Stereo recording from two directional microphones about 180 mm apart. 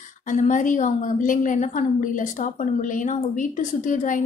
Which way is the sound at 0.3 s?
45° left (ahead or behind).